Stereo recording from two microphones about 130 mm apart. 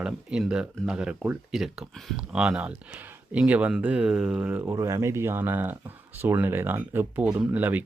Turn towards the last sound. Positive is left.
turn(degrees=-10)  # may be behind; listen again after turning